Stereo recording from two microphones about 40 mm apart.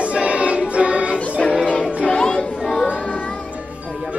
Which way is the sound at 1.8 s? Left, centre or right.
Centre.